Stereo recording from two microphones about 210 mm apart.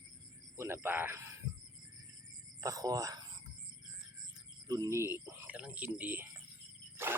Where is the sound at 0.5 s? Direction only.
10° right (ahead or behind).